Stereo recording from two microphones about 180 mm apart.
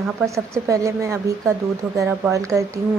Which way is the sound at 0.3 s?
15° right (ahead or behind).